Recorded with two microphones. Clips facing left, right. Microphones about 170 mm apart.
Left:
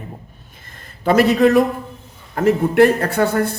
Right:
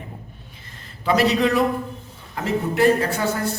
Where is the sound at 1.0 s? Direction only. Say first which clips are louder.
Left 5 dB; 50° left (ahead or behind).